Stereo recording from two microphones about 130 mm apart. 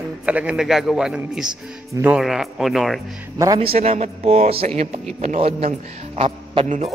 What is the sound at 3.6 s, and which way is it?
Speech, 50° right (ahead or behind).